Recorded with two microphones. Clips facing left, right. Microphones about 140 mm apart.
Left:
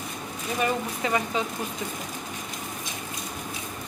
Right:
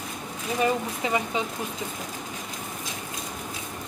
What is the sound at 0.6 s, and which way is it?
Speech, 15° right (ahead or behind).